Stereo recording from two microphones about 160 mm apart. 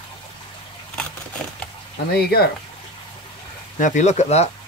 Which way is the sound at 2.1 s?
80° left.